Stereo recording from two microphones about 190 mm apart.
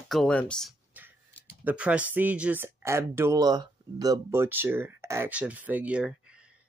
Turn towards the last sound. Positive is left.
turn(degrees=-5)  # may be behind; listen again after turning